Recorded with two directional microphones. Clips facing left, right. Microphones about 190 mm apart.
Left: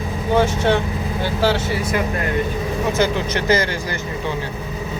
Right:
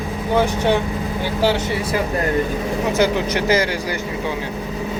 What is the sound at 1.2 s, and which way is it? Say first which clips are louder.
Speech: even; 15° right (ahead or behind).